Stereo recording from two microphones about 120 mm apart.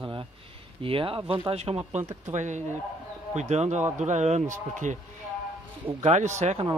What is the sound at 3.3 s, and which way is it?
Speech, 70° right (ahead or behind).